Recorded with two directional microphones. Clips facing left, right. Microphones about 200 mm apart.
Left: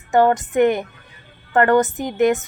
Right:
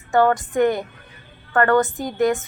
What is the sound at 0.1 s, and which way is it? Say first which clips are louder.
A woman's voice: left 2 dB; 20° left (ahead or behind).